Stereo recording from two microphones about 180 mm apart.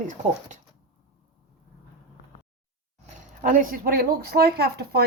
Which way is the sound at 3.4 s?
50° right (ahead or behind).